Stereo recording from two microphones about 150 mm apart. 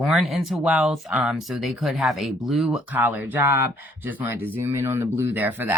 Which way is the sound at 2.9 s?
10° right (ahead or behind).